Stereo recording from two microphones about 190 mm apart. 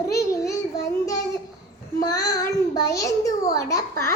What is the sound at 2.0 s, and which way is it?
Child singing, 20° left (ahead or behind).